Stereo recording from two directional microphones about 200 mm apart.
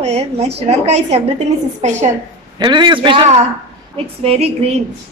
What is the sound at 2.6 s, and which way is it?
A woman's voice, 25° right (ahead or behind).